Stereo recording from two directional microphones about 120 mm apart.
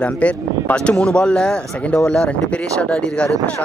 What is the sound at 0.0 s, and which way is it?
Speech, 10° left (ahead or behind).